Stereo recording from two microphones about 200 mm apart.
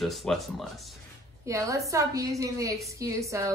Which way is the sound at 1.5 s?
15° right (ahead or behind).